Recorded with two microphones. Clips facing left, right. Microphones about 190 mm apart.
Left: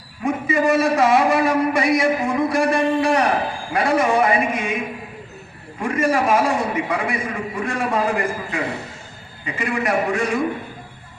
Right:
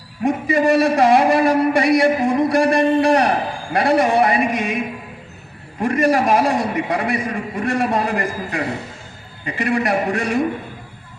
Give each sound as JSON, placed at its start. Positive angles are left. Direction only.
{"t": 0.3, "sound": "a man's voice", "side_deg": -35}
{"t": 5.8, "sound": "a man's voice", "side_deg": -35}